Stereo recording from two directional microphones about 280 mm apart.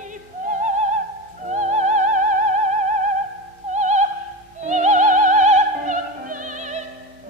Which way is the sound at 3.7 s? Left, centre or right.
Right.